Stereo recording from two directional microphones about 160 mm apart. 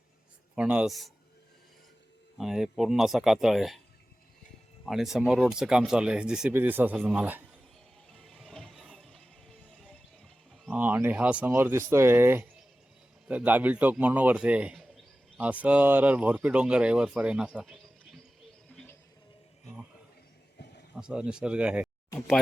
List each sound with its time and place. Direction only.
0.5 s speech: 5° right (ahead or behind)
2.4 s speech: centre (ahead or behind)
4.9 s speech: centre (ahead or behind)
8.1 s music: centre (ahead or behind)
10.8 s a man's voice: 10° right (ahead or behind)
18.7 s music: 10° left (ahead or behind)
20.6 s a sound: 90° left
20.9 s speech: 5° right (ahead or behind)